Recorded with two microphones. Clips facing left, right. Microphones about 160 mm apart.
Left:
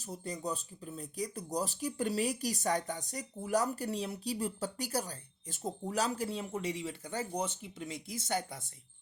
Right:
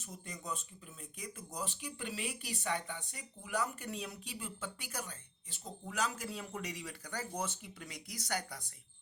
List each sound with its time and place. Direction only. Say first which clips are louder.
0.0 s speech: left 8 dB; 35° left (ahead or behind)